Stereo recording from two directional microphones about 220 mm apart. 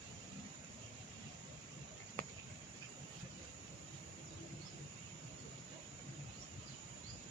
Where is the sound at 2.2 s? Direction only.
40° right (ahead or behind).